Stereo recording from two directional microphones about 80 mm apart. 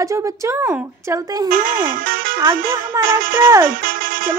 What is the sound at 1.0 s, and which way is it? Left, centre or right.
Speech, right.